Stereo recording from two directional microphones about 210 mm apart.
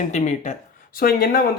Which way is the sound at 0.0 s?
35° left (ahead or behind).